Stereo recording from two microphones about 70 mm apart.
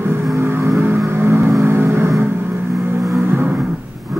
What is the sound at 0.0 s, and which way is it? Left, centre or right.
Vehicle, right.